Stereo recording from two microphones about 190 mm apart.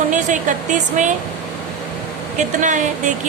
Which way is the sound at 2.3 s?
40° right (ahead or behind).